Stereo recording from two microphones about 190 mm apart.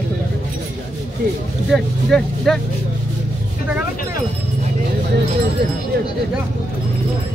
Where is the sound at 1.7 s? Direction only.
5° left (ahead or behind).